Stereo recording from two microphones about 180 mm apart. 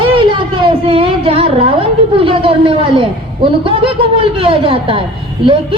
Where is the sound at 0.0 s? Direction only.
30° right (ahead or behind).